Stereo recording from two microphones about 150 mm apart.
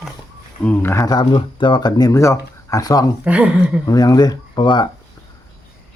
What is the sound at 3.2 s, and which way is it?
Speech, 10° right (ahead or behind).